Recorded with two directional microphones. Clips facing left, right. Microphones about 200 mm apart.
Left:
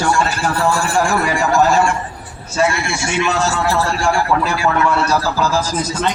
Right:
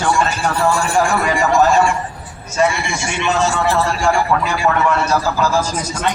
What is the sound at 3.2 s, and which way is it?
A man's voice, centre (ahead or behind).